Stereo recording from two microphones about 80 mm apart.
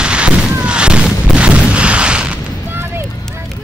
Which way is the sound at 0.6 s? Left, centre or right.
Centre.